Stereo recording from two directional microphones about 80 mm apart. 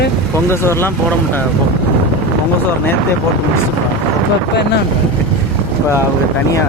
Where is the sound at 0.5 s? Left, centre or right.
Left.